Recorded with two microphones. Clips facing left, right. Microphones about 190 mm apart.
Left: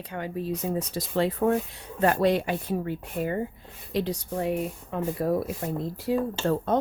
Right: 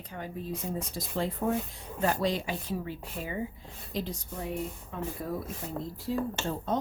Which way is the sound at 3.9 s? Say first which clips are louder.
Left 8 dB; 75° left (ahead or behind).